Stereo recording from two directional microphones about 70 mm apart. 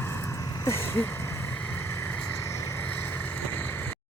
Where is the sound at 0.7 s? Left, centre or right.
Left.